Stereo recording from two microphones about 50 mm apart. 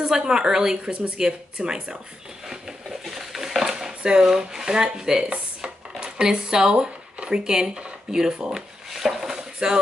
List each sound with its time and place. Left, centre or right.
0.0 s speech: centre
0.8 s speech: right
2.4 s a sound: centre